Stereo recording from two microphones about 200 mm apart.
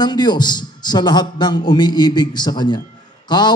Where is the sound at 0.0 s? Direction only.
20° left (ahead or behind).